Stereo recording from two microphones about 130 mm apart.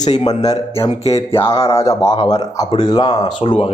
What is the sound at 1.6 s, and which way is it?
Speech, 20° left (ahead or behind).